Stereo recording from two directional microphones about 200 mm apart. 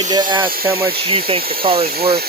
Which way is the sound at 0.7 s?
10° right (ahead or behind).